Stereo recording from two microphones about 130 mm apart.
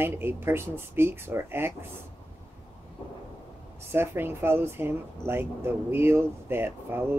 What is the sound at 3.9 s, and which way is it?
Speech, 15° right (ahead or behind).